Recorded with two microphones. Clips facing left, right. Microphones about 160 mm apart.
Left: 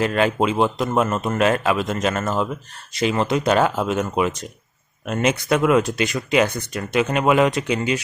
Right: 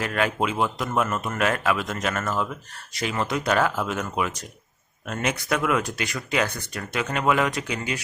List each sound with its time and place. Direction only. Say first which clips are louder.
0.0 s a man's voice: left 6 dB; 25° left (ahead or behind)